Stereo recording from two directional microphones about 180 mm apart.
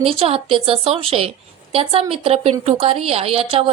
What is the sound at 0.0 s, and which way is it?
A woman's voice, 30° right (ahead or behind).